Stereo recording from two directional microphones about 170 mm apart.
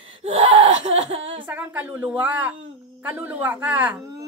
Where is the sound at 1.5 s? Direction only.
10° right (ahead or behind).